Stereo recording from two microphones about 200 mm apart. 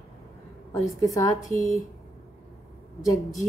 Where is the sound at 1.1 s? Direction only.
15° left (ahead or behind).